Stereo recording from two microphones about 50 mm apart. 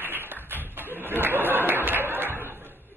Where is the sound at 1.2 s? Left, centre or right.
Right.